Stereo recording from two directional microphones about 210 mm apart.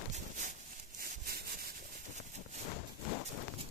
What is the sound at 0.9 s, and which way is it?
Sawing, 45° right (ahead or behind).